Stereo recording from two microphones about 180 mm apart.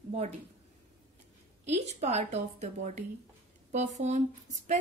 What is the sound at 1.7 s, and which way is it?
A woman's voice, 35° right (ahead or behind).